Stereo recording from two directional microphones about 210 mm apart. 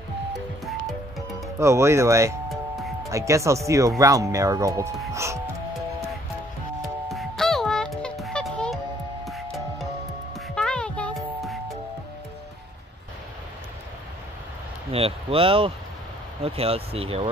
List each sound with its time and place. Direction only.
1.6 s speech: 15° right (ahead or behind)
2.5 s music: centre (ahead or behind)
3.1 s speech: 15° right (ahead or behind)
7.1 s music: centre (ahead or behind)
14.9 s a sound: 25° right (ahead or behind)
16.4 s speech: 30° right (ahead or behind)